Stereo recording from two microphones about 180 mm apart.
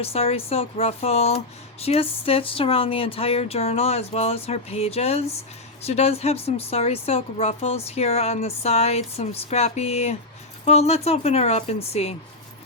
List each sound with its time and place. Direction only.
0.0 s a woman's voice: 35° left (ahead or behind)